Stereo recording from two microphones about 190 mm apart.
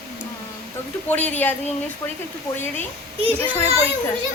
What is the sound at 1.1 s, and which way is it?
Speech, 10° left (ahead or behind).